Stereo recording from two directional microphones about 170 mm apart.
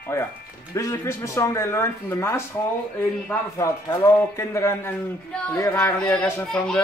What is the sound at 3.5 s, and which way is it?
Speech, 15° left (ahead or behind).